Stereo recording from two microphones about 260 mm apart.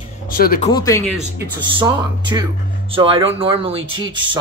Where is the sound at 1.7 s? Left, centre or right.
Centre.